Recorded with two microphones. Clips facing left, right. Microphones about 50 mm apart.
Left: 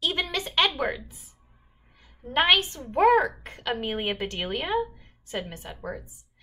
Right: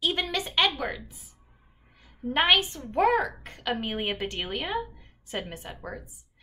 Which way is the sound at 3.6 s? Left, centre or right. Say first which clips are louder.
Left 1 dB; centre.